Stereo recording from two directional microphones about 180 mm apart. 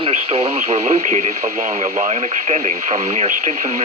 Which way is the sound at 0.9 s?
40° right (ahead or behind).